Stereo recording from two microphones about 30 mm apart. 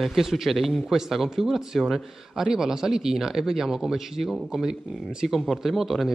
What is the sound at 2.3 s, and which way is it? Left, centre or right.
Speech, centre.